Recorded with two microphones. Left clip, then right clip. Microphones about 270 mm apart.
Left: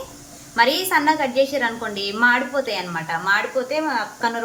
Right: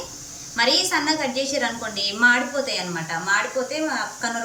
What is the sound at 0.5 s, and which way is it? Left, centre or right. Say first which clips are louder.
A woman's voice: left 2 dB; centre.